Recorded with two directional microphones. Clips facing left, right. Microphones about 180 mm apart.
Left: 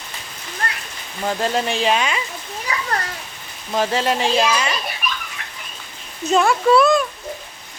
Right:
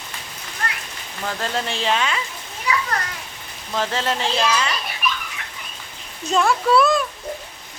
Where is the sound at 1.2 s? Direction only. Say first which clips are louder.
Left 5 dB; 20° left (ahead or behind).